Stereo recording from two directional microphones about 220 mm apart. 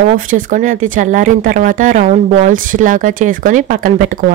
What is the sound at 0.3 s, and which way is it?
Speech, 35° right (ahead or behind).